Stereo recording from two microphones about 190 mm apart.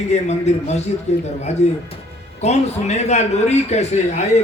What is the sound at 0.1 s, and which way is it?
A man's voice, 35° left (ahead or behind).